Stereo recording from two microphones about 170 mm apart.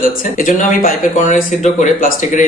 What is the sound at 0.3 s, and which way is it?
Speech, 55° left (ahead or behind).